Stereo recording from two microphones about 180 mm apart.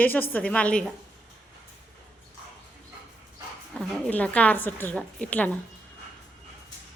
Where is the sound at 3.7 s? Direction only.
5° left (ahead or behind).